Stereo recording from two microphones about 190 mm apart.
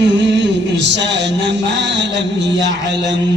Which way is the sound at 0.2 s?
65° right (ahead or behind).